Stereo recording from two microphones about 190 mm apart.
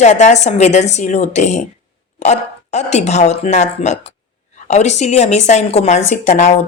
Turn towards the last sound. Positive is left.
turn(degrees=40)  # may be behind; listen again after turning